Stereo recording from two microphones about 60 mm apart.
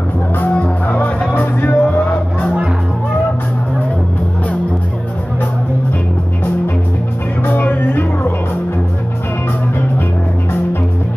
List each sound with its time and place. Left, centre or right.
0.4 s music: left
7.4 s music: left